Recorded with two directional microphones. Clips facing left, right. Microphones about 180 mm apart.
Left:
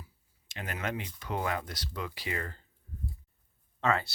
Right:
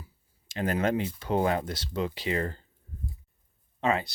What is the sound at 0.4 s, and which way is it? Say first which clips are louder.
Speech: right 10 dB; 35° right (ahead or behind).